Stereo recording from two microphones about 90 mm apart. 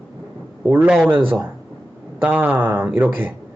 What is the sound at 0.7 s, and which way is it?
Speech, 20° right (ahead or behind).